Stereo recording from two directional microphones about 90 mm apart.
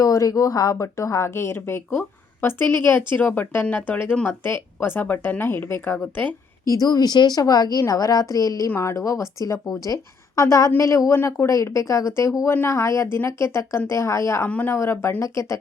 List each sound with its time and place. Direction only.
0.0 s a woman's voice: 40° left (ahead or behind); by 6.0 s 25° left (ahead or behind)
6.7 s a woman's voice: 45° left (ahead or behind)
14.4 s speech: 20° left (ahead or behind)
14.7 s a woman's voice: 30° left (ahead or behind)